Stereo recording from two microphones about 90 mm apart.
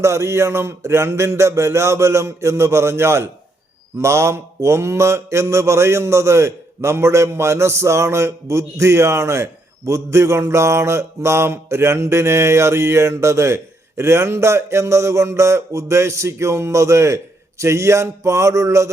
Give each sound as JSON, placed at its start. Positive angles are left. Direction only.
{"t": 0.0, "sound": "mantra", "side_deg": -35}